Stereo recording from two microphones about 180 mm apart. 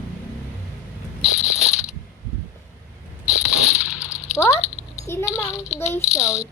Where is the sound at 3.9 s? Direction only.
5° right (ahead or behind).